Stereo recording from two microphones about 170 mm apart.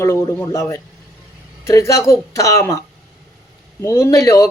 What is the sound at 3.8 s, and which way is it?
Speech, 15° left (ahead or behind).